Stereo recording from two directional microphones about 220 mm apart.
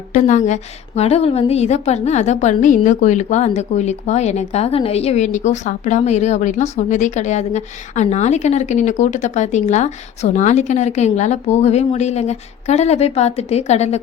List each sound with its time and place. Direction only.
0.1 s a woman's voice: 35° left (ahead or behind)